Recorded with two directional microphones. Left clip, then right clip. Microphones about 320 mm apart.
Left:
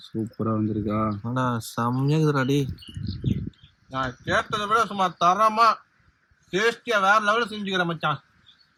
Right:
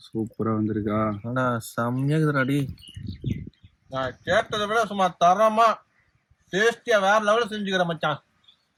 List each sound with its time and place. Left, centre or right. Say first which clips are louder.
0.3 s speech: even; centre
1.2 s speech: right 1 dB; centre
3.9 s speech: right 1 dB; centre